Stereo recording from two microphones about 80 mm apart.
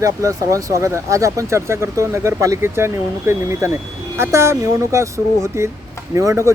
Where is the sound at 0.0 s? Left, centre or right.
Right.